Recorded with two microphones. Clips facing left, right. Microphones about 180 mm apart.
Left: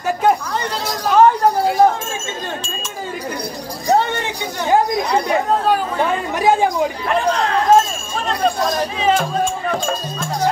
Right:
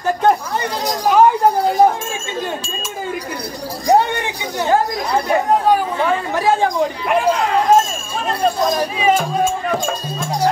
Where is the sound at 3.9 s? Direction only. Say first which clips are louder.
Right 2 dB; 15° right (ahead or behind).